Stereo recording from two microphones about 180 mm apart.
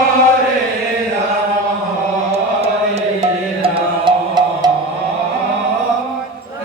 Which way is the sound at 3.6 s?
25° right (ahead or behind).